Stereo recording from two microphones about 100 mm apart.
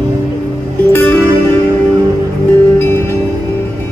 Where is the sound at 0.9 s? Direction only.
20° left (ahead or behind).